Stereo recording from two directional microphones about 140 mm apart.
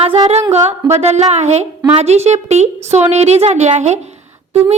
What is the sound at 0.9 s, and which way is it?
A woman's voice, 55° right (ahead or behind).